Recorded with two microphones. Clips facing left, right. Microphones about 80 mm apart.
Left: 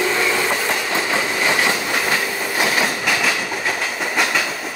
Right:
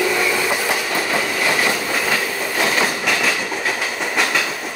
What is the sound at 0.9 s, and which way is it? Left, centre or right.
Train, left.